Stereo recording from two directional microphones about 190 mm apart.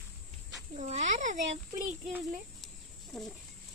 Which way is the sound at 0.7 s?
40° right (ahead or behind).